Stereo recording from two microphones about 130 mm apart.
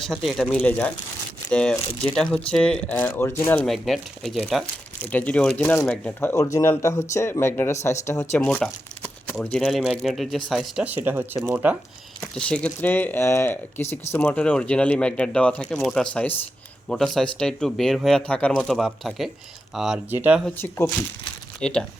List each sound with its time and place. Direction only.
0.0 s speech: centre (ahead or behind)
0.5 s speech: 10° left (ahead or behind)
3.6 s speech: centre (ahead or behind)
5.0 s speech: 10° left (ahead or behind)
8.6 s speech: 5° left (ahead or behind)
10.8 s speech: 15° right (ahead or behind)
12.3 s speech: 10° left (ahead or behind)
20.6 s speech: 20° left (ahead or behind)
21.6 s speech: 5° left (ahead or behind)